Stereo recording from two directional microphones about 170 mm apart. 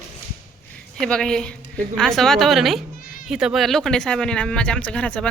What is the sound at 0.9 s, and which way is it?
Speech, 5° left (ahead or behind).